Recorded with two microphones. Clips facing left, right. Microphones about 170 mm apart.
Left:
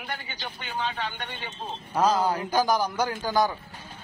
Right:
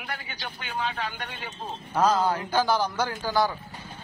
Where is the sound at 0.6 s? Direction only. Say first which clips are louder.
Even; 5° right (ahead or behind).